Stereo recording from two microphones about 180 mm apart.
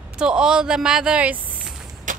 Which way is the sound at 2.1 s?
45° right (ahead or behind).